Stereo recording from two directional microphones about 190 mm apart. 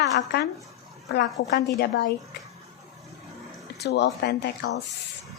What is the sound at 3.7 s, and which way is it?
Speech, 65° left (ahead or behind).